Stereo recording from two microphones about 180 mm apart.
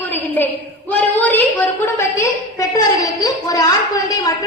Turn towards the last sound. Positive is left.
turn(degrees=20)  # may be behind; listen again after turning